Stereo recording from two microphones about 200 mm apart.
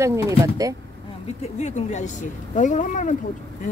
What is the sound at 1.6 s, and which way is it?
Speech, 35° left (ahead or behind).